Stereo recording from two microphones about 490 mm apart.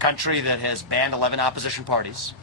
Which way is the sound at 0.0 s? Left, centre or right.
Right.